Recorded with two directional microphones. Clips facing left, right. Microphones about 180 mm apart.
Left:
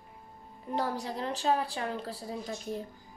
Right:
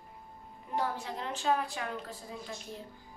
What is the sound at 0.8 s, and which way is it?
A woman's voice, 40° left (ahead or behind).